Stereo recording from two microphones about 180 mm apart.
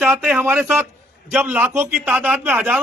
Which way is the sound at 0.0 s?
5° right (ahead or behind).